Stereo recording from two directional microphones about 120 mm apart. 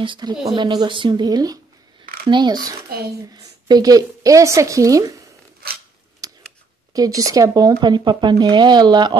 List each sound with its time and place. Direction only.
0.0 s a woman's voice: 40° right (ahead or behind)
6.2 s a sound: 30° right (ahead or behind)
6.9 s speech: 30° right (ahead or behind)